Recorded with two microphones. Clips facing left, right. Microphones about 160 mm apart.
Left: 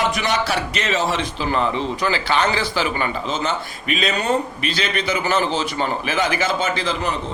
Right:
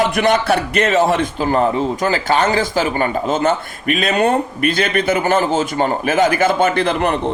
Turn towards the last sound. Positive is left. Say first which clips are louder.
# right 6 dB
turn(degrees=-60)  # may be behind; listen again after turning